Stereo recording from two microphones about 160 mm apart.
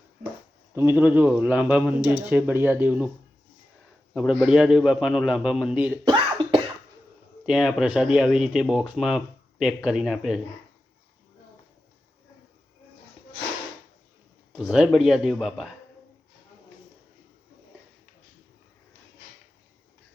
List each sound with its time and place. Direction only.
0.8 s speech: 10° right (ahead or behind)
4.1 s speech: 5° right (ahead or behind)
6.1 s cough: 30° right (ahead or behind)
7.4 s speech: centre (ahead or behind)
14.5 s speech: 5° right (ahead or behind)